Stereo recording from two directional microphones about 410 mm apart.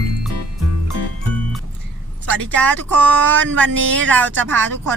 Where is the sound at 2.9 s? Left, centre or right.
Centre.